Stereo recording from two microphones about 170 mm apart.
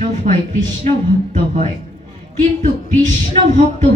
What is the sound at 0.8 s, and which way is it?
Music, 40° right (ahead or behind).